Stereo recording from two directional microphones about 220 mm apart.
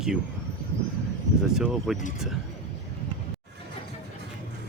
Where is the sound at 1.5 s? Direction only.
5° right (ahead or behind).